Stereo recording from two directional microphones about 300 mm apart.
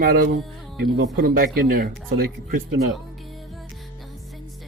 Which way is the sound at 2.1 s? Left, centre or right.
Right.